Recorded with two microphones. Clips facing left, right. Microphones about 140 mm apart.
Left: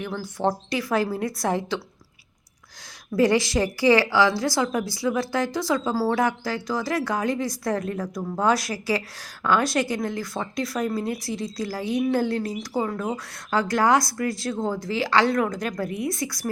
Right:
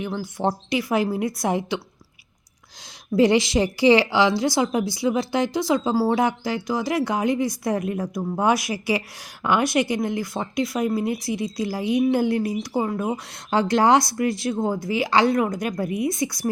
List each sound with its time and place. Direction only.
0.0 s a woman's voice: 20° right (ahead or behind)
3.2 s speech: 20° right (ahead or behind)